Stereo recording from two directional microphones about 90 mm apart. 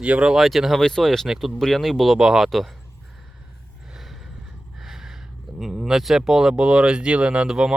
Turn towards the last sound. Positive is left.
turn(degrees=-10)  # may be behind; listen again after turning